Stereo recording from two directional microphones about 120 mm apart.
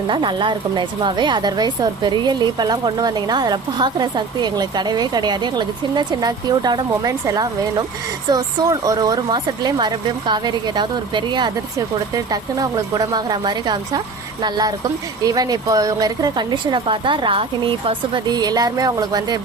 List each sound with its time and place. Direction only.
0.1 s a woman's voice: 40° right (ahead or behind)